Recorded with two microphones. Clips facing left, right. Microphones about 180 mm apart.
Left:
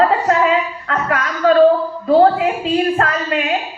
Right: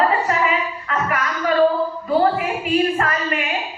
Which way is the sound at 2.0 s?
85° left.